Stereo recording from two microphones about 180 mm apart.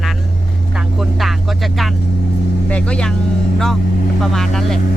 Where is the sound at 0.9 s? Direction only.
Centre (ahead or behind).